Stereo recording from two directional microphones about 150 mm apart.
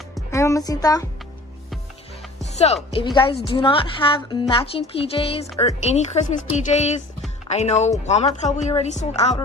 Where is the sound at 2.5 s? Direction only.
45° left (ahead or behind).